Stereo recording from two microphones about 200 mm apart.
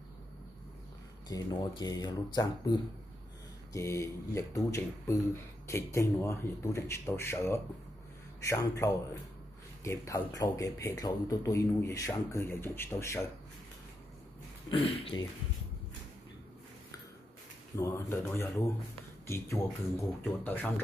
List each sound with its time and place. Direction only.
1.3 s speech: 20° left (ahead or behind)
14.7 s speech: 30° left (ahead or behind)
17.7 s speech: 15° left (ahead or behind)